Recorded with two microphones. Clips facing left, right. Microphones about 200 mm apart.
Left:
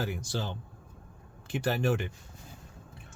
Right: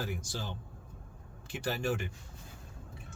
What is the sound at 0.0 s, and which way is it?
Speech, 70° left (ahead or behind).